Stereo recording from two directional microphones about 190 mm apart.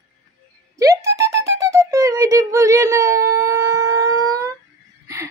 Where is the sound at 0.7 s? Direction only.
15° right (ahead or behind).